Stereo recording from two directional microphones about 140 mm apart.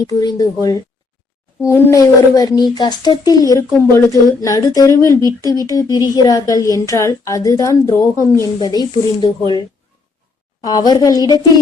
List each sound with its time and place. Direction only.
0.1 s a woman's voice: 25° left (ahead or behind)
10.6 s a woman's voice: 30° left (ahead or behind)